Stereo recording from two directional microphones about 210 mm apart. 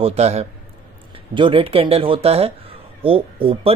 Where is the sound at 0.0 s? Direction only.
30° right (ahead or behind).